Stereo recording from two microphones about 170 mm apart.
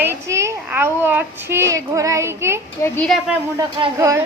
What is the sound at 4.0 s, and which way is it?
Speech, 20° right (ahead or behind).